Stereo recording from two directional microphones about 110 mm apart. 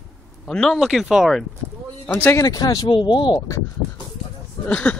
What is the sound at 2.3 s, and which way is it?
Speech, 35° left (ahead or behind).